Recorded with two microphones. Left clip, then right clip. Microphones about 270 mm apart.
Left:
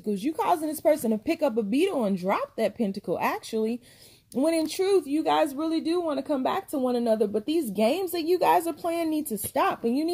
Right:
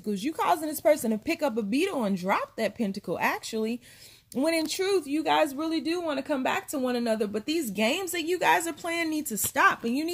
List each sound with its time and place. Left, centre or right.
0.1 s a woman's voice: centre